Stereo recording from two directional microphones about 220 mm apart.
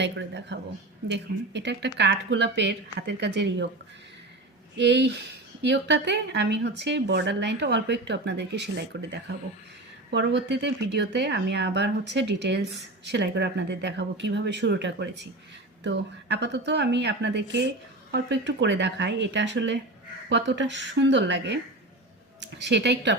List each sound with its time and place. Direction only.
0.0 s speech: 55° right (ahead or behind)
4.8 s speech: 50° right (ahead or behind)